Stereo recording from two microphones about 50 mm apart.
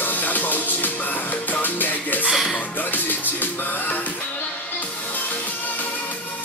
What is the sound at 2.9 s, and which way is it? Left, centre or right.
Music, left.